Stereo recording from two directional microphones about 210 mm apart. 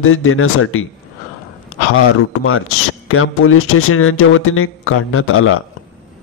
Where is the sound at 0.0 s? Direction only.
80° left.